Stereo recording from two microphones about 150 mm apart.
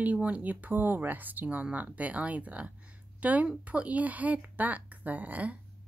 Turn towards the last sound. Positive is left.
turn(degrees=-10)  # may be behind; listen again after turning